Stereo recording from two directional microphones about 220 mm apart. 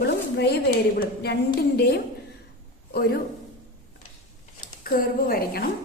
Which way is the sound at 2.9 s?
45° left (ahead or behind).